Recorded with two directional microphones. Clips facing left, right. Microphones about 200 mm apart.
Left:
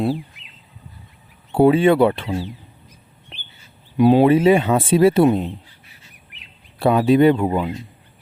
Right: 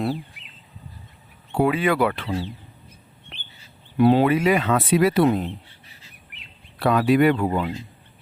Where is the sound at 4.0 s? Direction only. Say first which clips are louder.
Left 3 dB; 15° left (ahead or behind).